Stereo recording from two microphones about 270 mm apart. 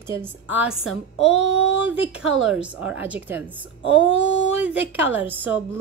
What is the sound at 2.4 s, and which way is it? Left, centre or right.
A woman's voice, centre.